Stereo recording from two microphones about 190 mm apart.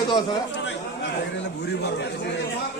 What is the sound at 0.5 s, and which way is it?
Chatter, 70° left (ahead or behind).